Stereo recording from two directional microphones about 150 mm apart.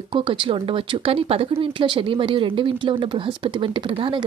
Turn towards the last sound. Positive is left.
turn(degrees=-35)  # may be behind; listen again after turning